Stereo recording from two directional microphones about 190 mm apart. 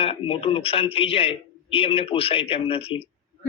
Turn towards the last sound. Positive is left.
turn(degrees=30)  # may be behind; listen again after turning